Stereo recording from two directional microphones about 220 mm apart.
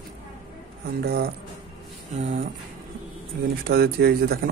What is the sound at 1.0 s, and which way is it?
Speech, 45° right (ahead or behind).